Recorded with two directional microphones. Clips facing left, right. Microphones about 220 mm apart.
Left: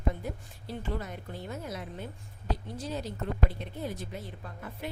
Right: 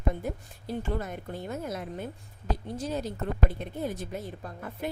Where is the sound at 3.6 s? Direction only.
50° right (ahead or behind).